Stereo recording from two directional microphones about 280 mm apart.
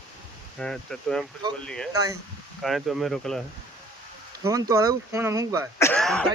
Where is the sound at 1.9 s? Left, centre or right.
Centre.